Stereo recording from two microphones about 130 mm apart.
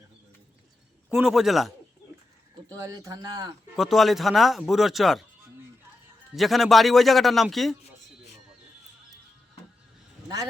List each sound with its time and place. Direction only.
1.1 s a man's voice: 5° right (ahead or behind)
2.6 s speech: 25° right (ahead or behind)
3.8 s a man's voice: centre (ahead or behind)
6.3 s a man's voice: centre (ahead or behind)